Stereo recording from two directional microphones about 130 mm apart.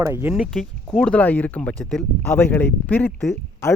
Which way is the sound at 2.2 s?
15° left (ahead or behind).